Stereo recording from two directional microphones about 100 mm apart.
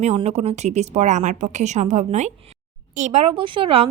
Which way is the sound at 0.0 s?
90° right.